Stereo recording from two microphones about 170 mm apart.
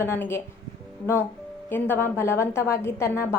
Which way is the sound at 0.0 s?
15° left (ahead or behind).